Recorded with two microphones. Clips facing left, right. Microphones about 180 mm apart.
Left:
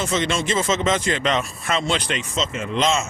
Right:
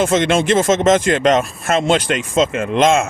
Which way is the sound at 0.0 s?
55° right (ahead or behind).